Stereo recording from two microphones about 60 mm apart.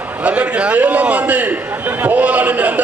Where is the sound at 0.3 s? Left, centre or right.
Right.